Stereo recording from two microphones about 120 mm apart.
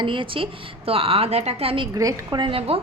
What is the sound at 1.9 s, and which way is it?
Speech, 30° right (ahead or behind).